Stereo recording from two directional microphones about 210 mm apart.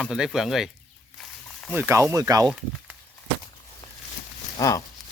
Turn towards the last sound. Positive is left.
turn(degrees=15)  # may be behind; listen again after turning